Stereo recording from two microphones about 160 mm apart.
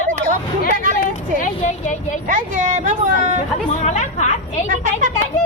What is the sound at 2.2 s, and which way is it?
Speech, 50° right (ahead or behind).